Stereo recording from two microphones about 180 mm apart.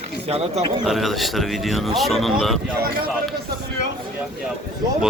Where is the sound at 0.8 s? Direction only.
Centre (ahead or behind).